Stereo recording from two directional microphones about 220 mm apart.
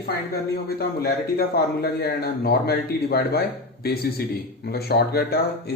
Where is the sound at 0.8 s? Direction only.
45° left (ahead or behind).